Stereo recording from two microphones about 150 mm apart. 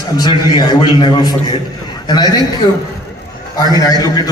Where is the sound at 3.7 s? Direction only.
25° left (ahead or behind).